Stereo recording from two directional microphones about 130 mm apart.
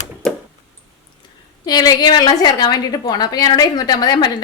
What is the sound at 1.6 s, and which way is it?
A woman's voice, 30° left (ahead or behind).